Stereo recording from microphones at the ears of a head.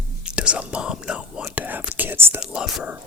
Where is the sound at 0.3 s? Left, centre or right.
Left.